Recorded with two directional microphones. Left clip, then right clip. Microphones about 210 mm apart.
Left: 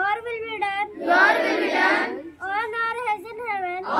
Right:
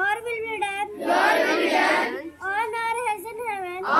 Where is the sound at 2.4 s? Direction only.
15° left (ahead or behind).